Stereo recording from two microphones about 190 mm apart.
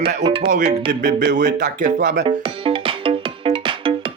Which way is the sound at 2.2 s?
25° right (ahead or behind).